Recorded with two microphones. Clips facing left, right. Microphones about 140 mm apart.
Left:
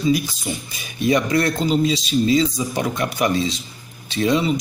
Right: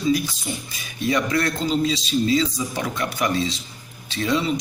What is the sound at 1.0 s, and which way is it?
A man's voice, 20° left (ahead or behind).